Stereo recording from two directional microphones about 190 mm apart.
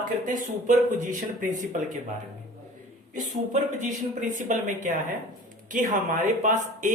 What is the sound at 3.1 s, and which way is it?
Speech, 40° right (ahead or behind).